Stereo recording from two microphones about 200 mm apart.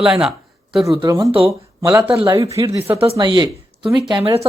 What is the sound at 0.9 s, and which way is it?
Speech, 15° right (ahead or behind).